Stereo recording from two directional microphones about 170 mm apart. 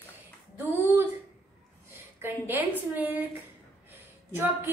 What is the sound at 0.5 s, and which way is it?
Speech, 15° right (ahead or behind).